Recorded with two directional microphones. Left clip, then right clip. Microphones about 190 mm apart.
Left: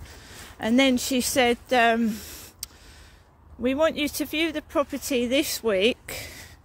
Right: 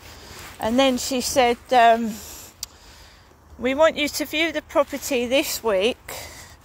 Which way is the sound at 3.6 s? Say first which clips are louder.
Right 5 dB; 35° left (ahead or behind).